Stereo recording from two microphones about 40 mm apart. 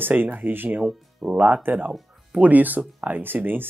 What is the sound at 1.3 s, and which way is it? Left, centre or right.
Speech, right.